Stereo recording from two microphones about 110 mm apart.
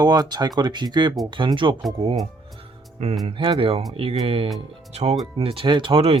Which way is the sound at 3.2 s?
50° right (ahead or behind).